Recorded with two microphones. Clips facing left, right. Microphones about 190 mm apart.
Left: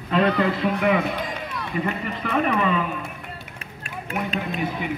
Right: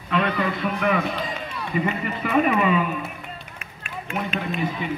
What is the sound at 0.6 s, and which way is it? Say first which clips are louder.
Speech: left 1 dB; 20° left (ahead or behind).